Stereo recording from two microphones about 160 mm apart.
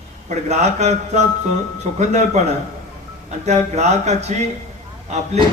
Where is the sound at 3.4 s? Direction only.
45° right (ahead or behind).